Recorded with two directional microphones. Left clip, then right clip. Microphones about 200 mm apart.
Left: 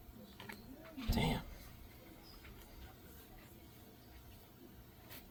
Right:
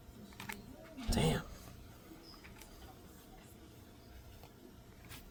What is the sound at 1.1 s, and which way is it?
Dog, 20° right (ahead or behind).